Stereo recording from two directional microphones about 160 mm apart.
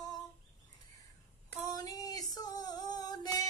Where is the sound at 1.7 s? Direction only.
20° left (ahead or behind).